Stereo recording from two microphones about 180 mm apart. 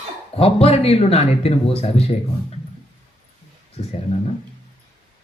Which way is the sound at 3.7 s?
35° left (ahead or behind).